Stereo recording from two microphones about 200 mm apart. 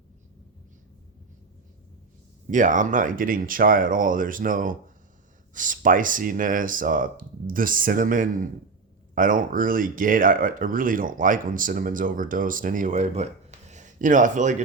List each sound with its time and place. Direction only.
2.5 s speech: 40° right (ahead or behind)